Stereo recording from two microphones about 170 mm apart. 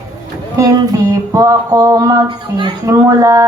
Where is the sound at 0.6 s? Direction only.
20° right (ahead or behind).